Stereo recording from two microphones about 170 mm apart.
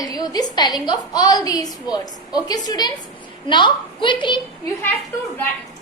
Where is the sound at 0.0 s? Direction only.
20° left (ahead or behind).